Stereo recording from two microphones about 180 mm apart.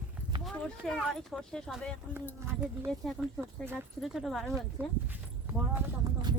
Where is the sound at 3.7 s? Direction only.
Centre (ahead or behind).